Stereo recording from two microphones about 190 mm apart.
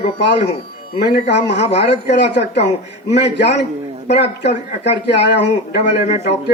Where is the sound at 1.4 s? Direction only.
65° left (ahead or behind).